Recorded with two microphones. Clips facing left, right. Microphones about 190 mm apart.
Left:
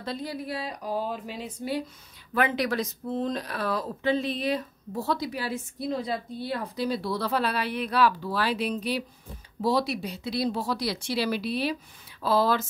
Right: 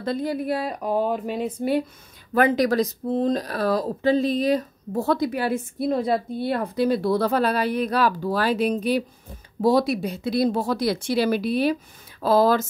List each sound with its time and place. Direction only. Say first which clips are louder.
0.0 s speech: right 8 dB; 50° right (ahead or behind)
2.3 s speech: right 7 dB; 40° right (ahead or behind)